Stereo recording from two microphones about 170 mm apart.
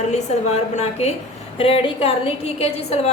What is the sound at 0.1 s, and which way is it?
A woman's voice, 40° left (ahead or behind).